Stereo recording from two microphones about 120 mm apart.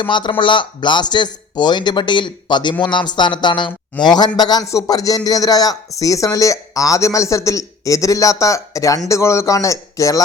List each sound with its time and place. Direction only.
0.0 s speech: 40° left (ahead or behind)